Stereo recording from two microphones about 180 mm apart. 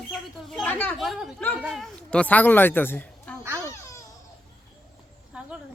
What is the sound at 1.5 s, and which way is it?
Speech, centre (ahead or behind).